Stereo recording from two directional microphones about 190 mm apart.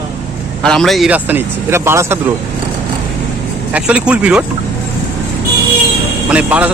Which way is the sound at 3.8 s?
5° right (ahead or behind).